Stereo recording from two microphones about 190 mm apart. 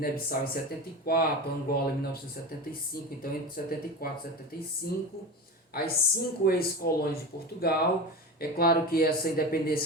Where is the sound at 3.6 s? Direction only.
45° left (ahead or behind).